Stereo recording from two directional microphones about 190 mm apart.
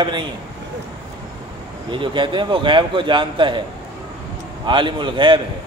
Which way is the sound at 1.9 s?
25° right (ahead or behind).